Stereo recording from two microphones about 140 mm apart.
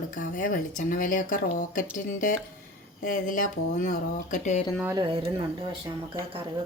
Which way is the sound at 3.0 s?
70° left (ahead or behind).